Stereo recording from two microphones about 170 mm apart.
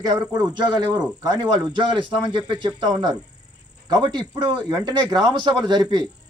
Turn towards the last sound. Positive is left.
turn(degrees=-25)  # may be behind; listen again after turning